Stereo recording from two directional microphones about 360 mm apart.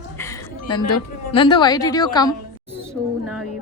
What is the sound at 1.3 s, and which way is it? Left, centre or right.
A woman's voice, centre.